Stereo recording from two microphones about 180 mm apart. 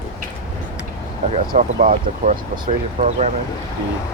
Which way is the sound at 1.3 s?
50° right (ahead or behind).